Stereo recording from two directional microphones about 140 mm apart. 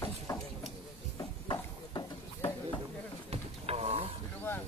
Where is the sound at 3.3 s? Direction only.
45° right (ahead or behind).